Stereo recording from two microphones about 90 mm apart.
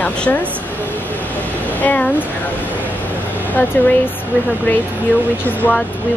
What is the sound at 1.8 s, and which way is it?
Speech, 20° left (ahead or behind).